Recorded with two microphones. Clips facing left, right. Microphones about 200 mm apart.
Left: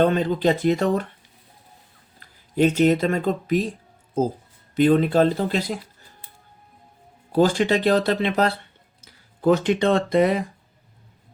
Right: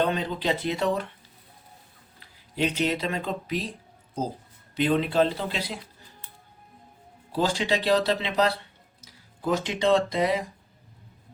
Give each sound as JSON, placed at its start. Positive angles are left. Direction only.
{"t": 0.0, "sound": "speech", "side_deg": 50}
{"t": 2.2, "sound": "speech", "side_deg": 50}
{"t": 7.3, "sound": "speech", "side_deg": 50}